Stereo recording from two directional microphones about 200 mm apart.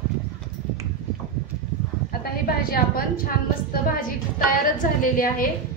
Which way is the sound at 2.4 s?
50° left (ahead or behind).